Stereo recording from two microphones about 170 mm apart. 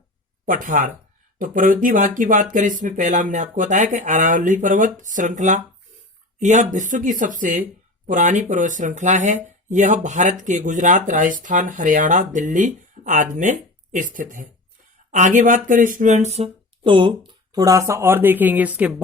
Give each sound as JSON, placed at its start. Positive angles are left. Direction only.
{"t": 0.4, "sound": "speech", "side_deg": -50}